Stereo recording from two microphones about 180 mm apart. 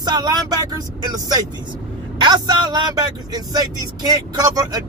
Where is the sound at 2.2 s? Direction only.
25° right (ahead or behind).